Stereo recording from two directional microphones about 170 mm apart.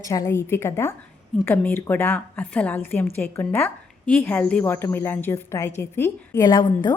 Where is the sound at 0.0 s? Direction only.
20° left (ahead or behind).